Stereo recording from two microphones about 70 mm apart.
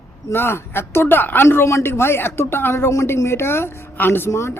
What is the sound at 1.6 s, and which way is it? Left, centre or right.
Speech, left.